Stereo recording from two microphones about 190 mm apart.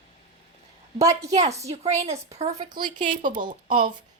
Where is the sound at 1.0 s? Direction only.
15° right (ahead or behind).